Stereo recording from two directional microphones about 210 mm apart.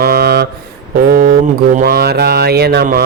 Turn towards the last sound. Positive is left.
turn(degrees=-50)  # may be behind; listen again after turning